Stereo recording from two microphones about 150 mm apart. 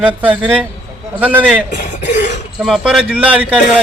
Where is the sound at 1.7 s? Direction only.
55° left (ahead or behind).